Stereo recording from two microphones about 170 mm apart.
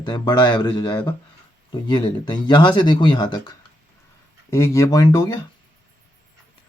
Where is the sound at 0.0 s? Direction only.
25° left (ahead or behind).